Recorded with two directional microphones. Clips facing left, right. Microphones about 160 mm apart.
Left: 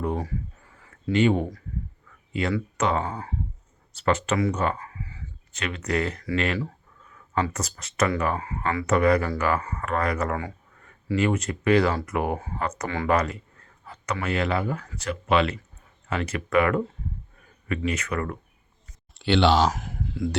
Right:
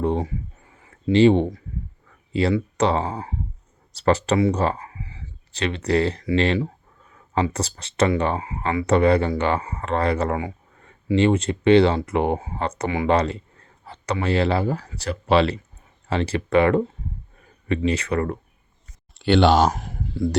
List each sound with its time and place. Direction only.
0.0 s a sound: 25° right (ahead or behind)
2.3 s speech: 30° right (ahead or behind)
12.9 s speech: 20° right (ahead or behind)
13.1 s speech: 30° right (ahead or behind)
19.3 s speech: 45° right (ahead or behind)
19.7 s a sound: 30° right (ahead or behind)